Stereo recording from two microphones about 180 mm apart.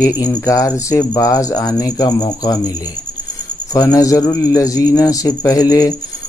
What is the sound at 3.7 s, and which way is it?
Speech, 20° left (ahead or behind).